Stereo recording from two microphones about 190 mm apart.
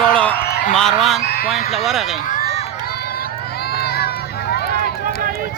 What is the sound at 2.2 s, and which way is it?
Run, 45° left (ahead or behind).